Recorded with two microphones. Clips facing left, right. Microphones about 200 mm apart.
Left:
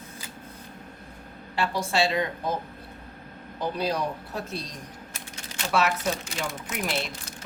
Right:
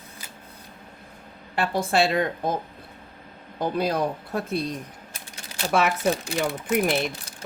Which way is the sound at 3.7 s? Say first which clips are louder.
Right 4 dB; 55° right (ahead or behind).